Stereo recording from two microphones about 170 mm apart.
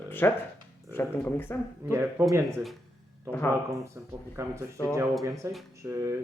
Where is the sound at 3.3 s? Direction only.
15° left (ahead or behind).